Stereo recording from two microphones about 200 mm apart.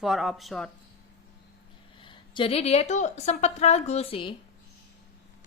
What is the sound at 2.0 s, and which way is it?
A woman's voice, 25° left (ahead or behind).